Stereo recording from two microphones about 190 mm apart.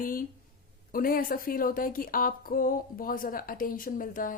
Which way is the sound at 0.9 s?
50° left (ahead or behind).